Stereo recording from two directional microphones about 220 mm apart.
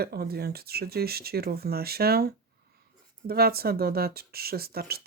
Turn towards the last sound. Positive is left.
turn(degrees=-45)  # may be behind; listen again after turning